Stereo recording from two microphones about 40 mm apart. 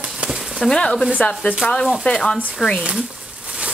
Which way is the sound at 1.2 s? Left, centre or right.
Left.